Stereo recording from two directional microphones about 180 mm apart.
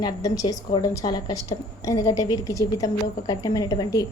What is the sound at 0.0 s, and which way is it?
A woman's voice, 20° left (ahead or behind).